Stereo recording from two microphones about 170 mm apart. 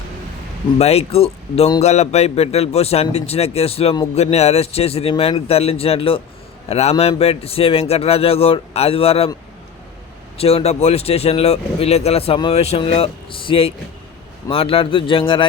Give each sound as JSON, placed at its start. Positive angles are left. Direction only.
{"t": 0.8, "sound": "speech", "side_deg": 35}
{"t": 10.3, "sound": "speech", "side_deg": 35}